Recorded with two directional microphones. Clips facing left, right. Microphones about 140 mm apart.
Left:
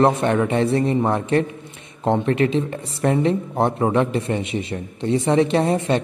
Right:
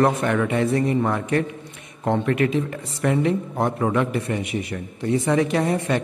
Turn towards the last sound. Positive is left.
turn(degrees=25)  # may be behind; listen again after turning